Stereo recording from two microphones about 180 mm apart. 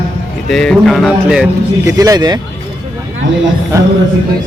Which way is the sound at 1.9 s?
20° right (ahead or behind).